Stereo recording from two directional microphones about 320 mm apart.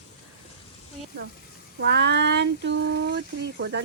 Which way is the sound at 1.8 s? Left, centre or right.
Right.